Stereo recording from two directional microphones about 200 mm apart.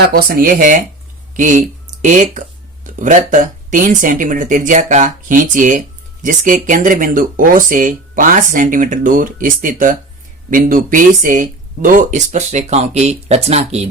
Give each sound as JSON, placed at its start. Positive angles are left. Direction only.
{"t": 0.1, "sound": "speech", "side_deg": -45}